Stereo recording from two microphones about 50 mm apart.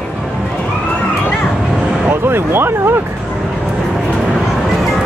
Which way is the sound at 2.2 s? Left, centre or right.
Right.